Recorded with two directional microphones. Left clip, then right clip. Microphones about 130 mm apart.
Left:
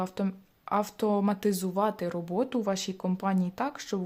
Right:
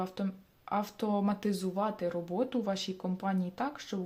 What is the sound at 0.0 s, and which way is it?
Speech, 40° left (ahead or behind).